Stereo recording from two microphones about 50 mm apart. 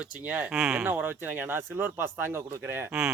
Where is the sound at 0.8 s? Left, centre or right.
Right.